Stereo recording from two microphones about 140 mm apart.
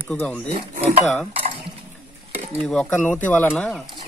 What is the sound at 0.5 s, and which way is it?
Speech, 40° right (ahead or behind).